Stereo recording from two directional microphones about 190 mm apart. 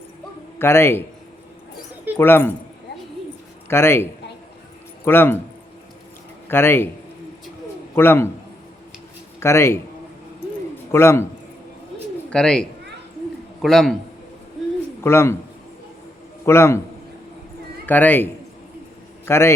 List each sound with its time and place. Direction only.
0.6 s a man's voice: 10° left (ahead or behind)
2.1 s a man's voice: 10° left (ahead or behind)
3.7 s a man's voice: 10° left (ahead or behind)
6.5 s a man's voice: 10° left (ahead or behind)
7.9 s a man's voice: 10° left (ahead or behind)
9.4 s a man's voice: 15° left (ahead or behind)
10.9 s a man's voice: 15° left (ahead or behind)
12.3 s speech: 5° left (ahead or behind)
14.6 s bird: centre (ahead or behind)
15.0 s a man's voice: 15° left (ahead or behind)
16.5 s a man's voice: 15° left (ahead or behind)
17.8 s a man's voice: 10° left (ahead or behind)